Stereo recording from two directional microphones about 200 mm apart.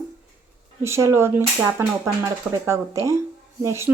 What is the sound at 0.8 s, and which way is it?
A child's voice, 15° right (ahead or behind).